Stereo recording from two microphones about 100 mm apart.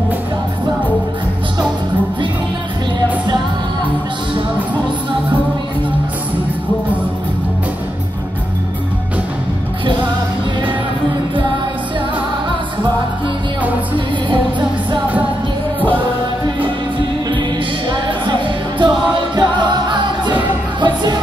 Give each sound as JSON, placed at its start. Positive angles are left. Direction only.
{"t": 18.0, "sound": "music", "side_deg": -50}